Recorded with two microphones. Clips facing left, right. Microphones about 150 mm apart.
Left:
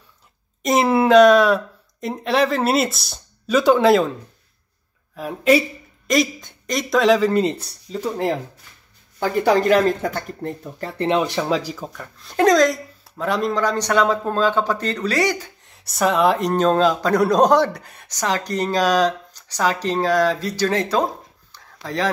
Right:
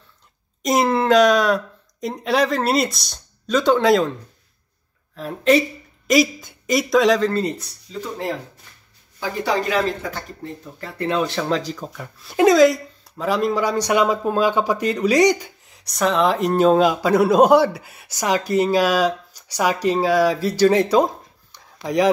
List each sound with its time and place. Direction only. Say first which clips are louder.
0.6 s speech: left 1 dB; centre (ahead or behind)
5.1 s speech: even; 10° left (ahead or behind)
6.0 s speech: right 2 dB; 5° right (ahead or behind)
7.2 s speech: left 3 dB; 15° left (ahead or behind)
7.5 s speech: left 3 dB; 30° left (ahead or behind)
9.2 s speech: left 5 dB; 55° left (ahead or behind)
11.0 s speech: left 2 dB; 20° left (ahead or behind)
12.0 s speech: right 1 dB; 10° right (ahead or behind)
15.6 s speech: left 3 dB; centre (ahead or behind); by 22.1 s 15° right (ahead or behind)